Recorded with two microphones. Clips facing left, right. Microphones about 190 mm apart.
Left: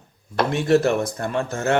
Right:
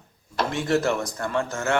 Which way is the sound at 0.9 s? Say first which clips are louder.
Left 5 dB; 60° left (ahead or behind).